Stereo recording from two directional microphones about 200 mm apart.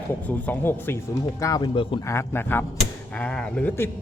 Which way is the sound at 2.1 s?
10° left (ahead or behind).